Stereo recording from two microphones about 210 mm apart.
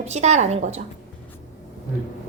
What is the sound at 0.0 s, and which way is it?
Speech, 30° right (ahead or behind).